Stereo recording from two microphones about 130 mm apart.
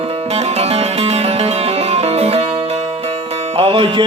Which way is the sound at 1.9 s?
55° right (ahead or behind).